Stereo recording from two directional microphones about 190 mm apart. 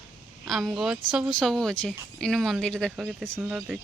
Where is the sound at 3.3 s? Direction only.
10° right (ahead or behind).